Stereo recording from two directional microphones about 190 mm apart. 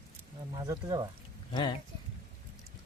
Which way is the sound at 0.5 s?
20° right (ahead or behind).